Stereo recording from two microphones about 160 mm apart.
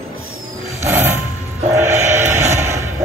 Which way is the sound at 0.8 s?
15° right (ahead or behind).